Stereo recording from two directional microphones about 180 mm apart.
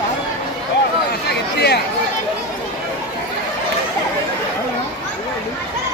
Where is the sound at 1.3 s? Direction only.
65° left (ahead or behind).